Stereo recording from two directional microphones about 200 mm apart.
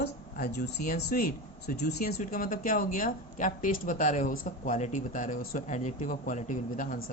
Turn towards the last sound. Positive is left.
turn(degrees=40)  # may be behind; listen again after turning